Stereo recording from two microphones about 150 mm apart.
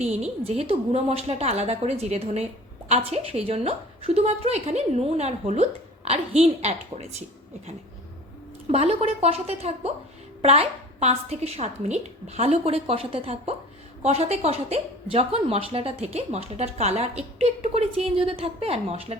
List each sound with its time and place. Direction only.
0.0 s a woman's voice: 45° right (ahead or behind)
8.6 s a woman's voice: 45° right (ahead or behind)